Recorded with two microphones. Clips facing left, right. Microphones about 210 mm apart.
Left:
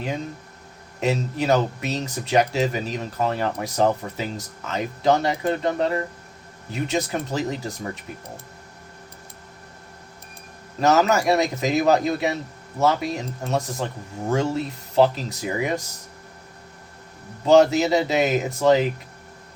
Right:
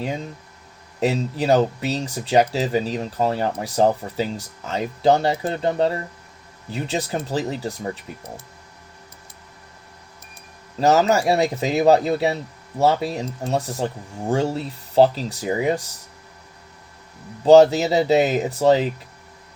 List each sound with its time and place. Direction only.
0.9 s speech: 30° right (ahead or behind)
10.8 s speech: 30° right (ahead or behind)
17.4 s speech: 35° right (ahead or behind)